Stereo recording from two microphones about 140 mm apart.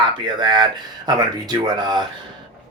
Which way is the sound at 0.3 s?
30° right (ahead or behind).